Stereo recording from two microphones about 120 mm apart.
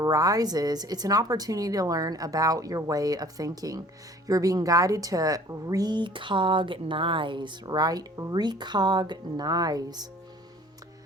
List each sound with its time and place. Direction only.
0.0 s speech: 30° right (ahead or behind)